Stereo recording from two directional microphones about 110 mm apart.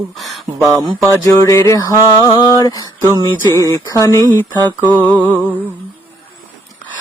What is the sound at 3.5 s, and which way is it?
Speech, 25° left (ahead or behind).